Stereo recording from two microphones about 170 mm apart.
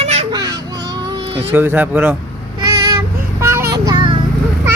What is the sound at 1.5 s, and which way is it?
Speech, 10° right (ahead or behind).